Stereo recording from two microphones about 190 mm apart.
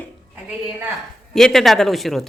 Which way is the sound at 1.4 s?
Centre (ahead or behind).